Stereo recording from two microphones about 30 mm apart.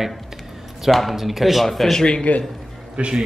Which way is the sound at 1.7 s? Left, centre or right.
Centre.